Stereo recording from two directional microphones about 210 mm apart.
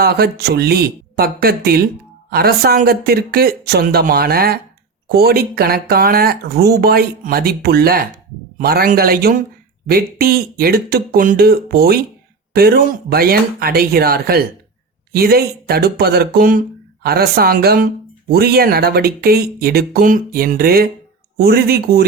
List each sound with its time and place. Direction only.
0.0 s speech: 50° right (ahead or behind)